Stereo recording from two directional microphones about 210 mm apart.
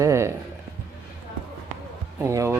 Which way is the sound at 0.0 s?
15° right (ahead or behind).